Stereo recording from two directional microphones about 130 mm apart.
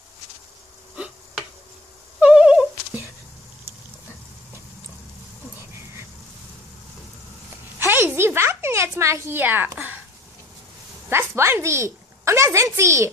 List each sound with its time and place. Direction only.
0.9 s a sound: 10° right (ahead or behind)
2.1 s cat: 10° right (ahead or behind)
7.8 s speech: 20° right (ahead or behind)
11.1 s a woman's voice: 20° right (ahead or behind)